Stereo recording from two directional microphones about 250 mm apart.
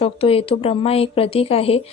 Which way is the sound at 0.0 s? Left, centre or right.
Left.